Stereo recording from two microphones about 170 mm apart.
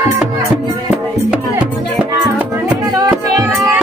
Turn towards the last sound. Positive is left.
turn(degrees=-20)  # may be behind; listen again after turning